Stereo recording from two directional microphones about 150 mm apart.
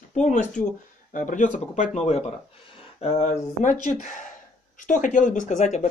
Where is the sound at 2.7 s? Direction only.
45° left (ahead or behind).